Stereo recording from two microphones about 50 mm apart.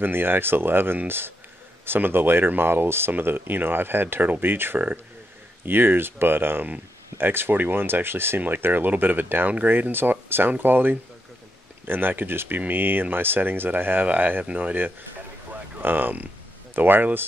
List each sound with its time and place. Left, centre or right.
0.0 s speech: right
15.8 s speech: right